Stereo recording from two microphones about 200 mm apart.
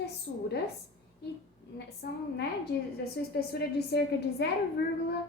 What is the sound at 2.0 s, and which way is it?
A woman's voice, 50° left (ahead or behind).